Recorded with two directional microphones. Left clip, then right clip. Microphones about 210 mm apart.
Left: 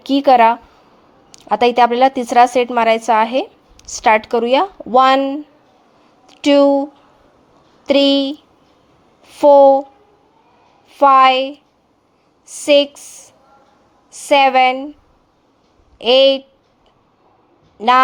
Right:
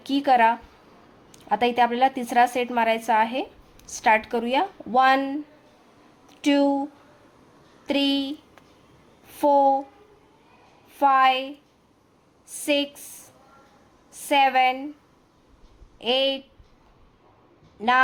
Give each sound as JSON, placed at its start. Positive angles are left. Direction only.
{"t": 0.0, "sound": "a woman's voice", "side_deg": 25}
{"t": 7.9, "sound": "a woman's voice", "side_deg": 25}
{"t": 10.8, "sound": "a woman's voice", "side_deg": 20}
{"t": 16.0, "sound": "a woman's voice", "side_deg": 25}
{"t": 17.7, "sound": "a woman's voice", "side_deg": 25}